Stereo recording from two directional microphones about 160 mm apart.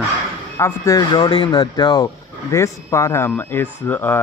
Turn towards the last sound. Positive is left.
turn(degrees=15)  # may be behind; listen again after turning